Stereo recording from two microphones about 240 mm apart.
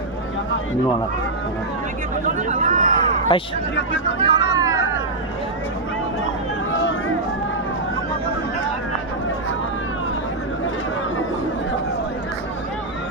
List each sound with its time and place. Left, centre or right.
2.2 s a sound: right
3.3 s speech: centre
3.9 s speech: left
4.5 s cat: centre